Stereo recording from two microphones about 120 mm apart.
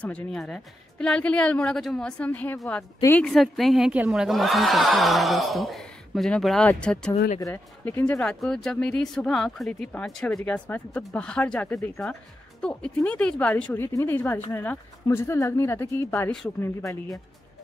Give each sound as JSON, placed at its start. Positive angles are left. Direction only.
{"t": 0.0, "sound": "a woman's voice", "side_deg": 5}
{"t": 3.3, "sound": "a woman's voice", "side_deg": 0}
{"t": 7.3, "sound": "speech", "side_deg": 25}
{"t": 7.8, "sound": "a woman's voice", "side_deg": 15}
{"t": 13.8, "sound": "speech", "side_deg": 25}